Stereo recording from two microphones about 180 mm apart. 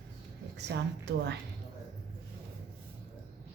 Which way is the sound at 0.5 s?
70° right (ahead or behind).